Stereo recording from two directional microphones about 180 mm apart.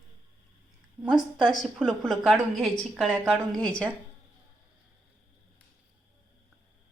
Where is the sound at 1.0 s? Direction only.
5° right (ahead or behind).